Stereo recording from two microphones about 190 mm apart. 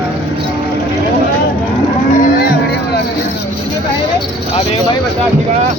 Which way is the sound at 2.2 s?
50° left (ahead or behind).